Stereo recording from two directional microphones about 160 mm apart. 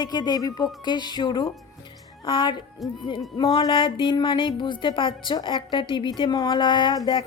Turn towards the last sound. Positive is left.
turn(degrees=30)  # may be behind; listen again after turning